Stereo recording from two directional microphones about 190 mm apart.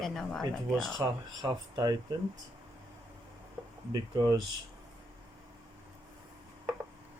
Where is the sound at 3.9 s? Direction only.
20° right (ahead or behind).